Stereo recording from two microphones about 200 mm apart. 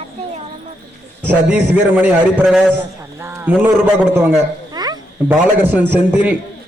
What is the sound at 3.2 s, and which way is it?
A man's voice, 15° right (ahead or behind).